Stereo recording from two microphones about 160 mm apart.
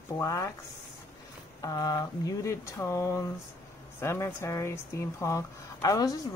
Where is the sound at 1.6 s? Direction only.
25° left (ahead or behind).